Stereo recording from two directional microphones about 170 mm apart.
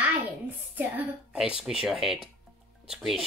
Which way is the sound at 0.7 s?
10° right (ahead or behind).